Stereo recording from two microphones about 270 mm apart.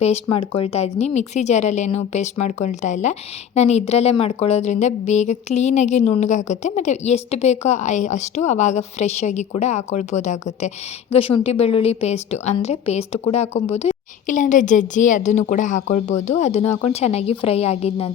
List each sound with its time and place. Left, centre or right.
0.0 s a woman's voice: left